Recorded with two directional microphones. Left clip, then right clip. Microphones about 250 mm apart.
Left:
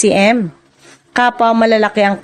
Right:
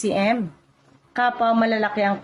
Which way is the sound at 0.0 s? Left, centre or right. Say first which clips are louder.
Left 10 dB; left.